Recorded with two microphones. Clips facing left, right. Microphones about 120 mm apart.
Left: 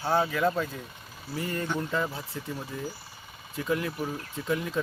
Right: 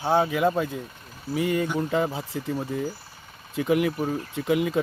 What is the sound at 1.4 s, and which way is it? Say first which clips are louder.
Speech: right 8 dB; 90° right.